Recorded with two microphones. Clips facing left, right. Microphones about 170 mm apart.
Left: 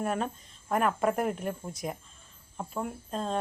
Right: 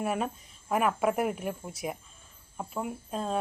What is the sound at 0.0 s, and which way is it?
A woman's voice, 5° right (ahead or behind).